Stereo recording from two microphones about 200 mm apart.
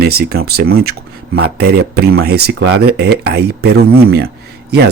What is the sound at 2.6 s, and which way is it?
Speech, 90° right.